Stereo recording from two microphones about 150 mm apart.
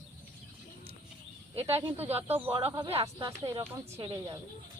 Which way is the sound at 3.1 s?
25° right (ahead or behind).